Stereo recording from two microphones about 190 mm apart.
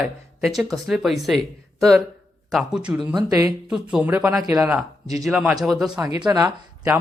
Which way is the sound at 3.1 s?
15° right (ahead or behind).